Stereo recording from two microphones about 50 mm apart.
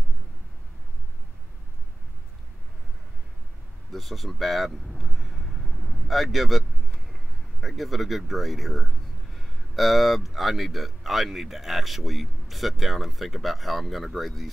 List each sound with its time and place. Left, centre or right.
3.9 s speech: centre
7.6 s speech: centre